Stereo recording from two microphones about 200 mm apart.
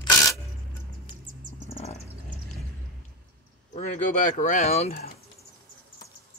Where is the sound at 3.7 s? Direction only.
35° left (ahead or behind).